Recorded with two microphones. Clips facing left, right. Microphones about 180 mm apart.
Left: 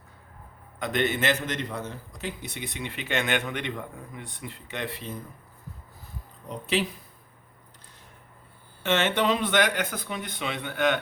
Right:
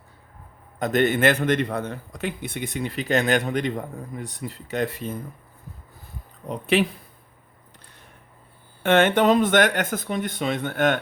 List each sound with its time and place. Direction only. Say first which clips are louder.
0.8 s a man's voice: right 6 dB; 45° right (ahead or behind)
6.5 s speech: right 6 dB; 60° right (ahead or behind)
8.8 s a man's voice: right 7 dB; 55° right (ahead or behind)